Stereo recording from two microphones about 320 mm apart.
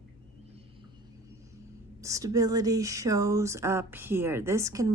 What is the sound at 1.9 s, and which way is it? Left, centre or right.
Speech, centre.